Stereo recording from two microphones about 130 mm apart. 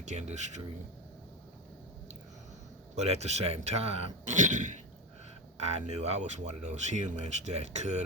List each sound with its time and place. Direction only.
0.0 s speech: 60° right (ahead or behind)
2.9 s speech: 55° right (ahead or behind)
5.5 s speech: 60° right (ahead or behind)